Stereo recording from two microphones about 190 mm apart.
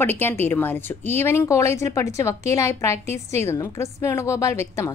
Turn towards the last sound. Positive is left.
turn(degrees=15)  # may be behind; listen again after turning